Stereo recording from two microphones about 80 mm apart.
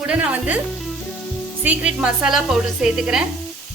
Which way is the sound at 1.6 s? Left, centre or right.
Centre.